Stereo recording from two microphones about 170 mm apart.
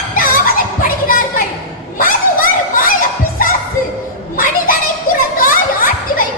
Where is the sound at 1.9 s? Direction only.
55° left (ahead or behind).